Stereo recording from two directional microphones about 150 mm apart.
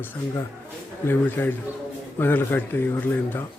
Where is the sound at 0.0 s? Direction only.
15° left (ahead or behind).